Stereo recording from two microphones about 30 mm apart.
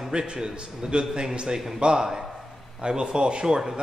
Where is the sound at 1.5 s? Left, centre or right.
Centre.